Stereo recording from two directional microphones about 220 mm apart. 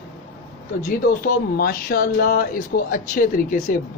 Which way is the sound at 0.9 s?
40° left (ahead or behind).